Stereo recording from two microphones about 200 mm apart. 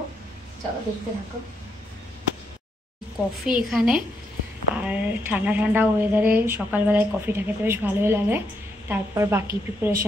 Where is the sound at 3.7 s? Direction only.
5° right (ahead or behind).